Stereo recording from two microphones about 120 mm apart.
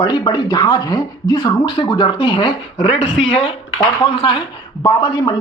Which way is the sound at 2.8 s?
60° left (ahead or behind).